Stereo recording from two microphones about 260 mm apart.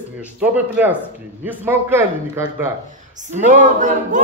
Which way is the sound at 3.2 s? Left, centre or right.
Right.